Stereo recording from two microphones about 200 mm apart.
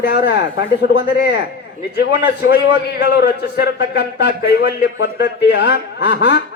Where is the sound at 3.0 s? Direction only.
55° left (ahead or behind).